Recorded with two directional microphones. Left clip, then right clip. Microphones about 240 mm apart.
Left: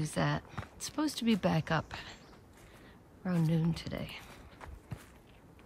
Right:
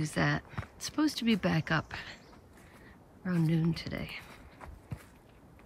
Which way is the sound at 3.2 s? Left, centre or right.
Centre.